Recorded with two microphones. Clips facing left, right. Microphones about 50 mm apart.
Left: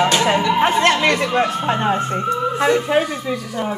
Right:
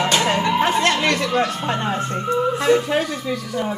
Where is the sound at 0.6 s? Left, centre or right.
Left.